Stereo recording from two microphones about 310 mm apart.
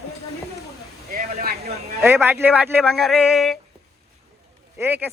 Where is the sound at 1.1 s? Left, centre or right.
Right.